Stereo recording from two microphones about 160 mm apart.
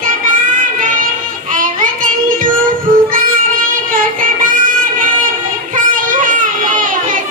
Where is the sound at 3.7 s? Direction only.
55° right (ahead or behind).